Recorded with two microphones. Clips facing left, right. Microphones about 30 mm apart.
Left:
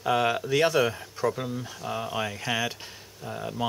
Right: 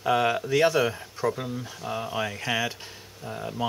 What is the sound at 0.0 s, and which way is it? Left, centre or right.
Speech, centre.